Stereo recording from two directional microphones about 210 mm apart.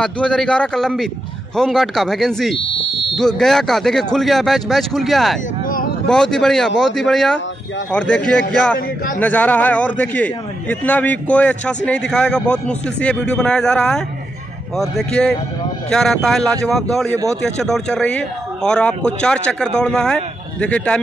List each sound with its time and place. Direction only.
0.0 s speech: 5° left (ahead or behind)
8.7 s a man's voice: 40° left (ahead or behind)
9.2 s a man's voice: 5° left (ahead or behind)